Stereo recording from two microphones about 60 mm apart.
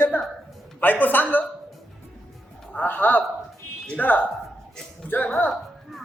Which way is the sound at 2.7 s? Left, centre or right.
Left.